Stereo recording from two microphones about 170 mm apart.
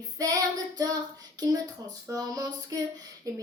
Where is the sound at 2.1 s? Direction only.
20° right (ahead or behind).